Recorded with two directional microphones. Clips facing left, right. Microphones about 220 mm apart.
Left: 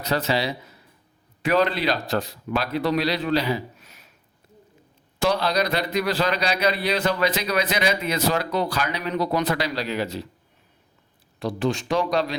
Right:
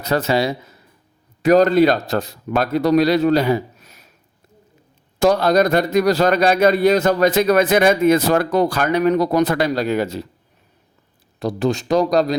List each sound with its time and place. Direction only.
0.0 s speech: 45° right (ahead or behind)
5.2 s speech: 45° right (ahead or behind)
11.3 s speech: 40° right (ahead or behind)